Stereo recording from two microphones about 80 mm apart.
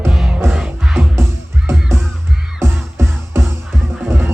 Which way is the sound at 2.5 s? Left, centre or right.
Right.